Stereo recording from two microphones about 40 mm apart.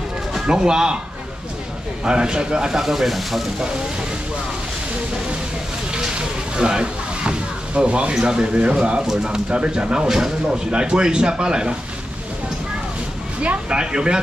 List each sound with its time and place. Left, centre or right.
0.5 s speech: right
2.0 s speech: right
2.8 s speech: centre
6.1 s speech: right
9.0 s speech: centre
10.0 s speech: centre
13.7 s speech: right